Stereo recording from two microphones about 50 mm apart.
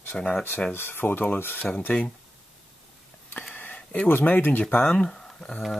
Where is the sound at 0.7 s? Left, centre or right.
Left.